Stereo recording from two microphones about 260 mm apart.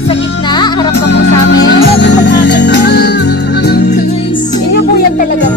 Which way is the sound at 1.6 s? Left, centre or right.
Left.